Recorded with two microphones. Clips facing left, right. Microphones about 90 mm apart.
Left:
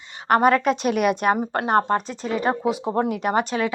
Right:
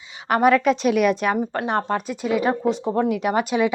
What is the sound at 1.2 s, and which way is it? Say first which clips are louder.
Speech: left 1 dB; 50° left (ahead or behind).